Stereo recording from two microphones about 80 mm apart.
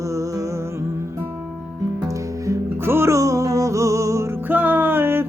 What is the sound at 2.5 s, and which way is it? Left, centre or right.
Music, right.